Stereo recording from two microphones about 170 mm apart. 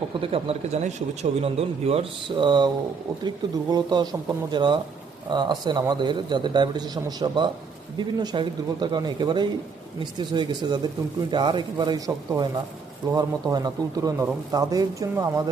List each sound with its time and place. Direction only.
0.2 s speech: 35° right (ahead or behind); by 15.3 s 20° right (ahead or behind)